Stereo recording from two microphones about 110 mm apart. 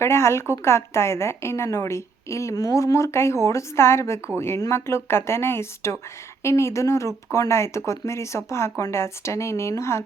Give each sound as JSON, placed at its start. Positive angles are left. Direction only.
{"t": 0.0, "sound": "a woman's voice", "side_deg": 25}